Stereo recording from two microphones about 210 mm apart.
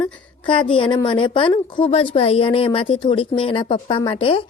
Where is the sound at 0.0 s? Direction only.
20° left (ahead or behind).